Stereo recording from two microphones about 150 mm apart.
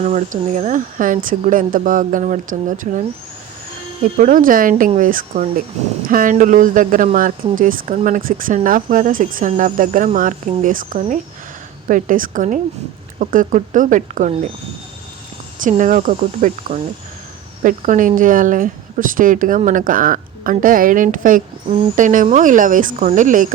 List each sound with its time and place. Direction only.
0.0 s speech: 55° right (ahead or behind)
4.2 s speech: 65° right (ahead or behind)
15.8 s speech: 60° right (ahead or behind)